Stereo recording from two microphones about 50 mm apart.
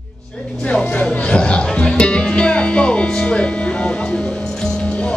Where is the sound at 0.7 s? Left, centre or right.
Centre.